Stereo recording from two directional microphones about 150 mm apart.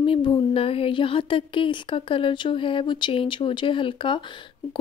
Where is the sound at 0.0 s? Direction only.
35° left (ahead or behind).